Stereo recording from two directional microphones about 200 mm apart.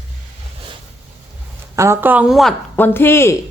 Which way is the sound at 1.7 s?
15° right (ahead or behind).